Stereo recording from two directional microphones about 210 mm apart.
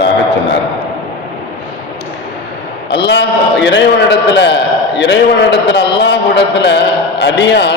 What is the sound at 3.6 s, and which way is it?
Speech, 60° left (ahead or behind).